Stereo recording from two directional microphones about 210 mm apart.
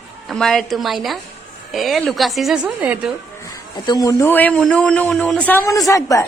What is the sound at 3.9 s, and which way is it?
Speech, 15° left (ahead or behind).